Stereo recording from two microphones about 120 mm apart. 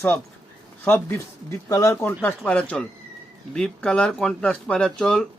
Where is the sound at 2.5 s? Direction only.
10° left (ahead or behind).